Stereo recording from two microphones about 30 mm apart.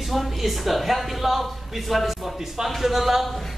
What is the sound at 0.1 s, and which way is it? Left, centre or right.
Speech, centre.